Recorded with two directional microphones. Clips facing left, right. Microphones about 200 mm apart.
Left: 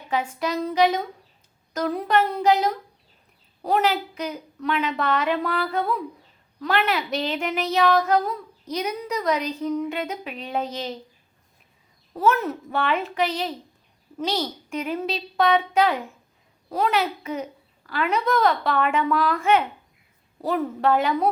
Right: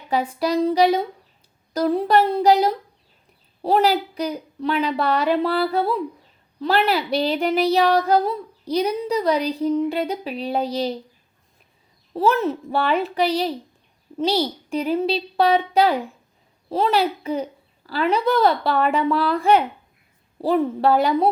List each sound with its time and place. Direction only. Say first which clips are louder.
0.1 s a woman's voice: right 4 dB; 35° right (ahead or behind)
12.1 s a woman's voice: right 3 dB; 30° right (ahead or behind)